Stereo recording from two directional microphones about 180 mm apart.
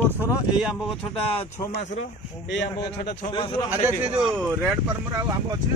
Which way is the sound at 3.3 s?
30° left (ahead or behind).